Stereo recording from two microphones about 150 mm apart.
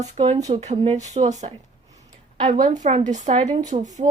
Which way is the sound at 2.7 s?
55° right (ahead or behind).